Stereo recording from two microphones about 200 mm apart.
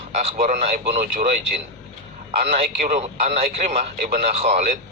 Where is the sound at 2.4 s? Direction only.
35° right (ahead or behind).